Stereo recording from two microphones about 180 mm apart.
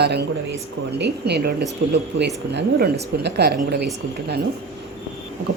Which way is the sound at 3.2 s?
65° right (ahead or behind).